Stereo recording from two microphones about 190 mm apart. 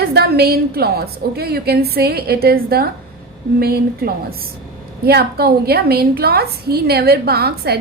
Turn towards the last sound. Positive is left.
turn(degrees=-55)  # may be behind; listen again after turning